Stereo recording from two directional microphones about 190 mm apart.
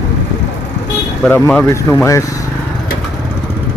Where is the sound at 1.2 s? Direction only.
10° left (ahead or behind).